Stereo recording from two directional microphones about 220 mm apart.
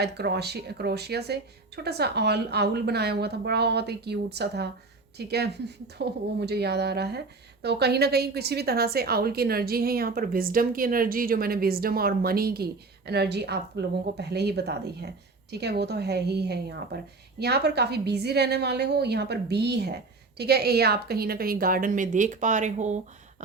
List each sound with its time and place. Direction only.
0.0 s a woman's voice: 50° right (ahead or behind); by 23.0 s 35° right (ahead or behind)